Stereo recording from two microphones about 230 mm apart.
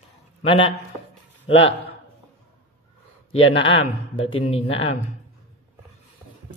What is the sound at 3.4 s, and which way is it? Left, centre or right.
Mantra, left.